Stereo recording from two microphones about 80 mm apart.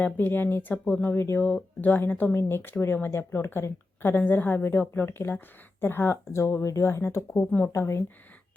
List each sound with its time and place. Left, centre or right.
0.0 s speech: left
1.0 s speech: left
1.5 s speech: centre; by 8.0 s left